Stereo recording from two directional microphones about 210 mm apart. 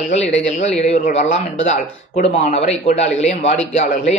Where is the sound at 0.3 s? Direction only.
30° left (ahead or behind).